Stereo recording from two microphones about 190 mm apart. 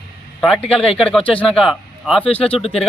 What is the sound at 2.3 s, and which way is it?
Speech, 30° left (ahead or behind).